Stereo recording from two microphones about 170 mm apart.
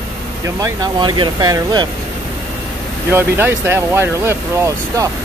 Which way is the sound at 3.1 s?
15° right (ahead or behind).